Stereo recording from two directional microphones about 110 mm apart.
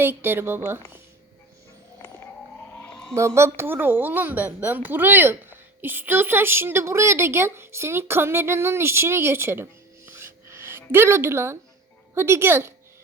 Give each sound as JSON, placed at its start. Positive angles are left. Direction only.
{"t": 0.0, "sound": "speech", "side_deg": -20}
{"t": 2.0, "sound": "a sound", "side_deg": 20}
{"t": 3.2, "sound": "speech", "side_deg": -25}
{"t": 10.1, "sound": "music", "side_deg": -20}
{"t": 12.1, "sound": "speech", "side_deg": -20}